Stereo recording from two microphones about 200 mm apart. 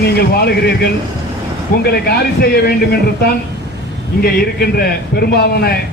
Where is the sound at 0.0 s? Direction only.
55° left (ahead or behind).